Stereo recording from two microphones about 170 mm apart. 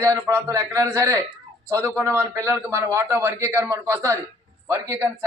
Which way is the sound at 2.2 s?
15° right (ahead or behind).